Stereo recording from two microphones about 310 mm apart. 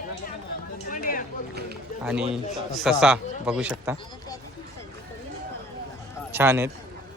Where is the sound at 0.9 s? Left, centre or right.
Left.